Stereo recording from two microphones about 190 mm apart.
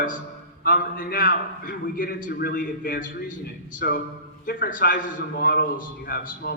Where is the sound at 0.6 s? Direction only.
50° left (ahead or behind).